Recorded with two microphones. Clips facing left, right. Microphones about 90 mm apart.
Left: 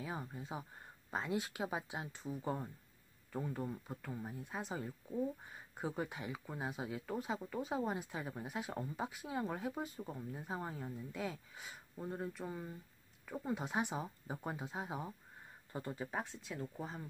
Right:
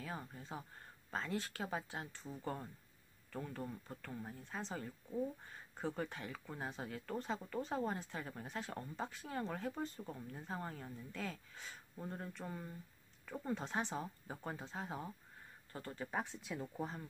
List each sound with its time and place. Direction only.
0.0 s speech: 15° left (ahead or behind)
16.1 s speech: centre (ahead or behind)